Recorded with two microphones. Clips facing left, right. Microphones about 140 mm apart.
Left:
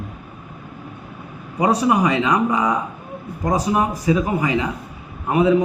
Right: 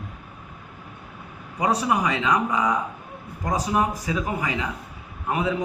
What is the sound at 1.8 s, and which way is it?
A man's voice, 15° left (ahead or behind).